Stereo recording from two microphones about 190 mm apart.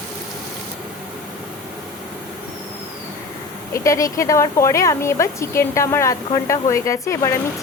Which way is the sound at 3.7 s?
15° left (ahead or behind).